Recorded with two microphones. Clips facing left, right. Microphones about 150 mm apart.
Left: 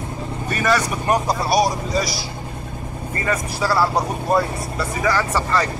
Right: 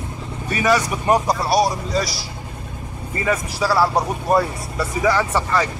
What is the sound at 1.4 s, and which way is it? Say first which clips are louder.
Speech: even; 30° right (ahead or behind).